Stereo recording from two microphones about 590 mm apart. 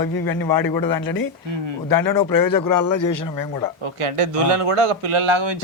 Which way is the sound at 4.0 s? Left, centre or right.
Right.